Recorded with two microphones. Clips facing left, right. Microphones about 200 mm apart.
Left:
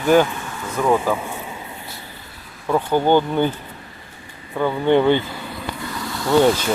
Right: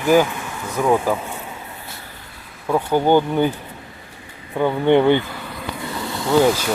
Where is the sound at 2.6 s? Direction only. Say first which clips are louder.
Even; 10° right (ahead or behind).